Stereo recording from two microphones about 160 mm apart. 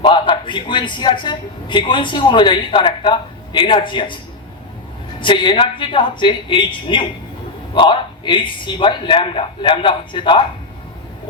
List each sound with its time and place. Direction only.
0.0 s a man's voice: 30° left (ahead or behind)
5.2 s a man's voice: 30° left (ahead or behind)